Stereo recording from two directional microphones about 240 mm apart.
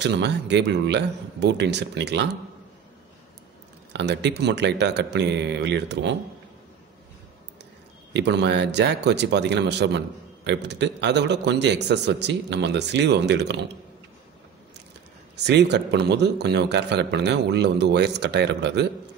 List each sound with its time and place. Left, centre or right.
0.0 s speech: right
3.9 s speech: right
8.1 s speech: right
15.3 s speech: right